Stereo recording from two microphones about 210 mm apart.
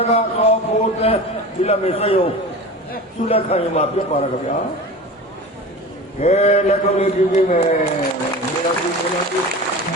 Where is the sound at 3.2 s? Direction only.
30° left (ahead or behind).